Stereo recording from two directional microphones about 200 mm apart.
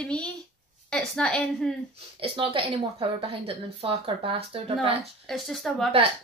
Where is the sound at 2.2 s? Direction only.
25° right (ahead or behind).